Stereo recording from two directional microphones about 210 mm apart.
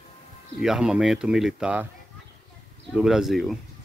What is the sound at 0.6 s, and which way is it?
Speech, 5° right (ahead or behind).